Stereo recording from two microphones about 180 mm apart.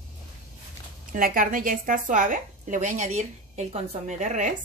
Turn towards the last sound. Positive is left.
turn(degrees=-40)  # may be behind; listen again after turning